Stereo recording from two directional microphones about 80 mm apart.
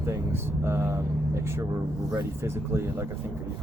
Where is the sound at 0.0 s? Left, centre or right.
Right.